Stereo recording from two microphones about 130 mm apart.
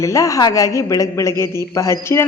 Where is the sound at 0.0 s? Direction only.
25° left (ahead or behind).